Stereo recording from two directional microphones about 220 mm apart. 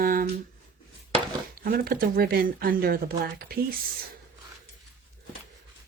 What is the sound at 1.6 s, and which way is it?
Speech, 45° right (ahead or behind).